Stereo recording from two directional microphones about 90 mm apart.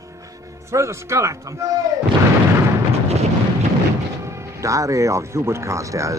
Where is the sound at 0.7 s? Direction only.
30° right (ahead or behind).